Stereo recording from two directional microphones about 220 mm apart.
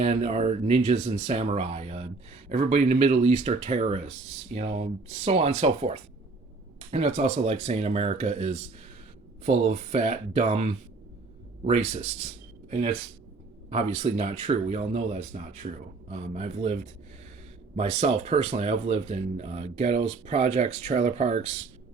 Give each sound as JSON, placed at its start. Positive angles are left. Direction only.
{"t": 0.0, "sound": "speech", "side_deg": -30}
{"t": 17.7, "sound": "speech", "side_deg": -30}